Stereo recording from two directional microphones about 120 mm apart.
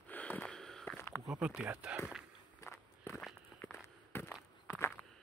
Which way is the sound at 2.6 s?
20° left (ahead or behind).